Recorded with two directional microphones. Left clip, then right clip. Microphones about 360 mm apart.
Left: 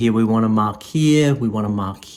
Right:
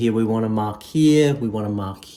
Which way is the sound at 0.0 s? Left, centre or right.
Centre.